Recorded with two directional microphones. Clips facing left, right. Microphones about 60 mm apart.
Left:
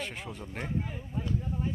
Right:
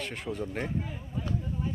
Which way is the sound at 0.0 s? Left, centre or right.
Centre.